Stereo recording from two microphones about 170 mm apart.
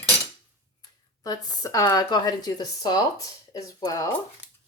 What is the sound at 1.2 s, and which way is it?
Speech, 20° left (ahead or behind).